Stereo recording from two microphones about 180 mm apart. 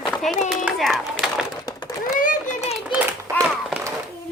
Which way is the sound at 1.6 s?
20° left (ahead or behind).